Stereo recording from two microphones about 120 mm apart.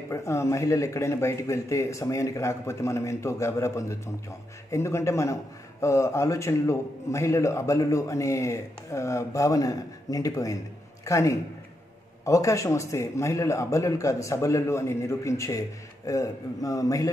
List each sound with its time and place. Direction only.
0.1 s a man's voice: 25° left (ahead or behind)